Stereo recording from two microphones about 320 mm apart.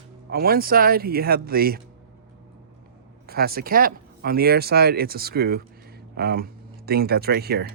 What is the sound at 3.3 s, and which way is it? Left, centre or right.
Speech, right.